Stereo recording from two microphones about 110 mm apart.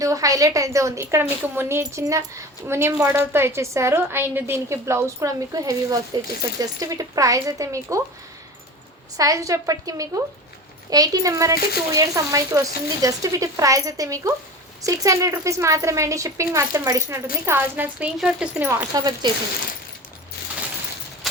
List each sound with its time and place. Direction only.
0.0 s a woman's voice: 30° right (ahead or behind)
9.1 s a woman's voice: 30° right (ahead or behind); by 18.6 s 5° right (ahead or behind)
18.6 s a woman's voice: 20° right (ahead or behind)
18.9 s speech: 40° right (ahead or behind)